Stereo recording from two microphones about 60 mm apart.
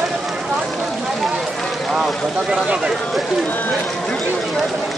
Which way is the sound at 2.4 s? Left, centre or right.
Centre.